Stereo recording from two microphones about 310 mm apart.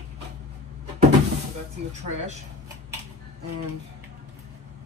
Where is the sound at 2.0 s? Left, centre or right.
Right.